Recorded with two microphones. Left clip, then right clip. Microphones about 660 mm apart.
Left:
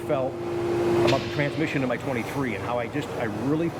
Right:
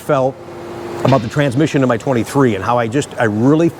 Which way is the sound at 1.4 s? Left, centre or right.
Right.